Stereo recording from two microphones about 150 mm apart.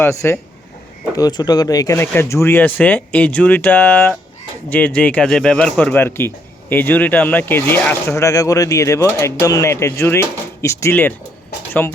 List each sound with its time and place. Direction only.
0.0 s a man's voice: 20° left (ahead or behind)